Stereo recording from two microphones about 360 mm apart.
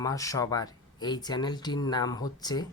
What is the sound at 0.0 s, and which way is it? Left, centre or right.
Speech, centre.